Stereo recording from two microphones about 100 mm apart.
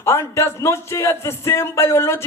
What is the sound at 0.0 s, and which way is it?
A man's voice, 25° left (ahead or behind).